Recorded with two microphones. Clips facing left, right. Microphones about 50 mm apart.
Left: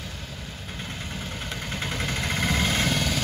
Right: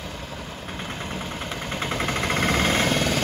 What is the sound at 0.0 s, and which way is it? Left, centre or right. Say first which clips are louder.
Vehicle: right 4 dB; right.